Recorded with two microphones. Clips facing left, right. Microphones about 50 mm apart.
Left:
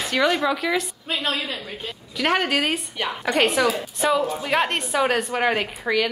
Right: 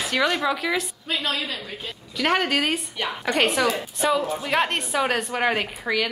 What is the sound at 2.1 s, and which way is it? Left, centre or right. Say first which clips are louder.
A woman's voice: left 1 dB; centre.